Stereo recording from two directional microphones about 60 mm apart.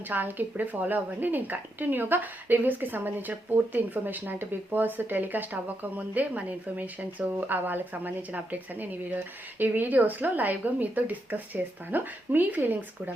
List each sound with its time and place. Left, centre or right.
0.1 s a woman's voice: right